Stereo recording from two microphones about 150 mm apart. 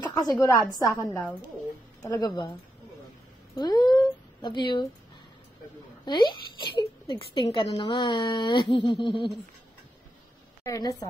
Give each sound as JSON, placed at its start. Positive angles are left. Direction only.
{"t": 0.0, "sound": "speech", "side_deg": 25}
{"t": 3.5, "sound": "speech", "side_deg": 25}
{"t": 6.0, "sound": "speech", "side_deg": 30}
{"t": 10.6, "sound": "speech", "side_deg": 20}